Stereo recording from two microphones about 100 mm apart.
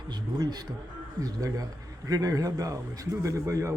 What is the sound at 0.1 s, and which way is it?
A man's voice, 45° right (ahead or behind).